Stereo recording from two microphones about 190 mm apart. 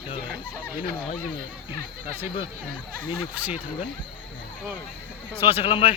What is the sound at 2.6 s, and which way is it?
Speech, 50° right (ahead or behind).